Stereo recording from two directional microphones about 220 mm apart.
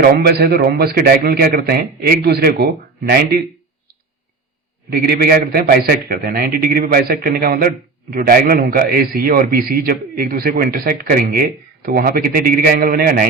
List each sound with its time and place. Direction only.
0.0 s a man's voice: 45° right (ahead or behind)
4.9 s a man's voice: 45° right (ahead or behind)